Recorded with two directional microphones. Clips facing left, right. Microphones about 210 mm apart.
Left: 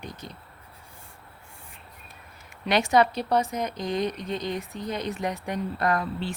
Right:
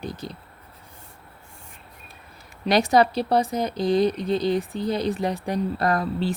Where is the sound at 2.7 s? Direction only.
35° right (ahead or behind).